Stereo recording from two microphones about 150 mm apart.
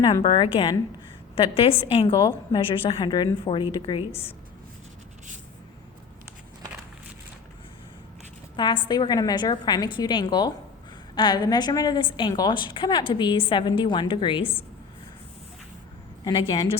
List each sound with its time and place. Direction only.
0.2 s a woman's voice: 35° left (ahead or behind)
8.5 s a woman's voice: 30° left (ahead or behind)
16.2 s a woman's voice: 30° left (ahead or behind)